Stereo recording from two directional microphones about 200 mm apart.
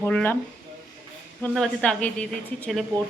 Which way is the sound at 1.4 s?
5° left (ahead or behind).